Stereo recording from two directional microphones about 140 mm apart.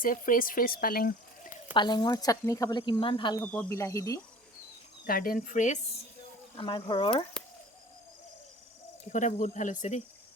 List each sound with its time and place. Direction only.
0.0 s speech: 75° left (ahead or behind)
1.7 s speech: 30° left (ahead or behind)
3.4 s speech: 15° left (ahead or behind)
5.0 s speech: 90° left; by 5.8 s 60° left (ahead or behind)
6.6 s speech: 35° left (ahead or behind)
9.1 s speech: 65° left (ahead or behind)